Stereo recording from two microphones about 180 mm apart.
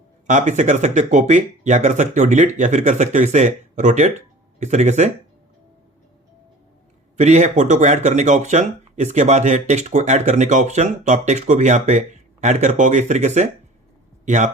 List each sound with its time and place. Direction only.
0.3 s speech: 45° right (ahead or behind)
7.2 s speech: 40° right (ahead or behind)